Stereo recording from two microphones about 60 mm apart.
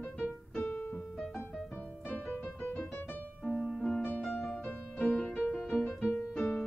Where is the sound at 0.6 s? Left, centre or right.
Left.